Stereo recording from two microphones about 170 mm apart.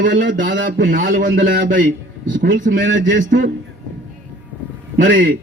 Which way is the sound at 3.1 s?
55° right (ahead or behind).